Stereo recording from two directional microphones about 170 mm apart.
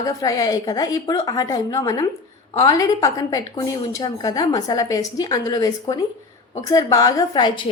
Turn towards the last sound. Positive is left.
turn(degrees=25)  # may be behind; listen again after turning